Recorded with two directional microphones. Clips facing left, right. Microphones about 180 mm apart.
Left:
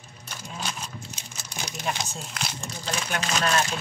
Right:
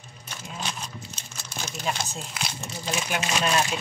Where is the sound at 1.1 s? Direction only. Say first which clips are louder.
Even; 15° left (ahead or behind).